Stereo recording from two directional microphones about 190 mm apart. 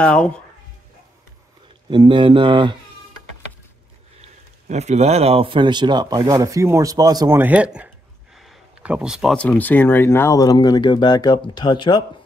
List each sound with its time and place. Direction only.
0.0 s speech: 5° left (ahead or behind)
1.9 s speech: 25° right (ahead or behind)
4.2 s speech: 35° right (ahead or behind); by 12.0 s 25° left (ahead or behind)